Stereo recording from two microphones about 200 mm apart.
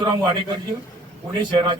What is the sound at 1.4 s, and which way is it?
Speech, 25° right (ahead or behind).